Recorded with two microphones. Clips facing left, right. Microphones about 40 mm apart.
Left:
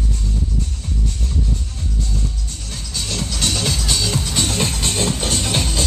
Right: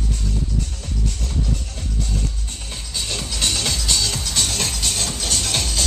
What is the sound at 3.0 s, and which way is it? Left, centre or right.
Music, centre.